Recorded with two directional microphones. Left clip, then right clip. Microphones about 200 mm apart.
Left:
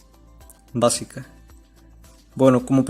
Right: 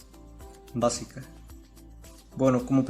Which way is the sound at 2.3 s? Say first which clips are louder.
Left 7 dB; 45° left (ahead or behind).